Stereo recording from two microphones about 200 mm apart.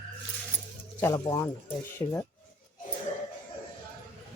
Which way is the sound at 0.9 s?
15° left (ahead or behind).